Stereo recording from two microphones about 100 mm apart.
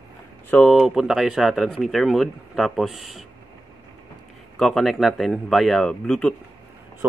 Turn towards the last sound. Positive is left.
turn(degrees=5)  # may be behind; listen again after turning